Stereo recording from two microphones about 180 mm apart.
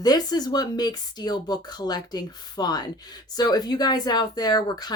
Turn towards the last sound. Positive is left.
turn(degrees=20)  # may be behind; listen again after turning